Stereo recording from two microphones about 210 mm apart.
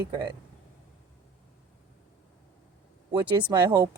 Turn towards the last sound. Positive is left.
turn(degrees=-20)  # may be behind; listen again after turning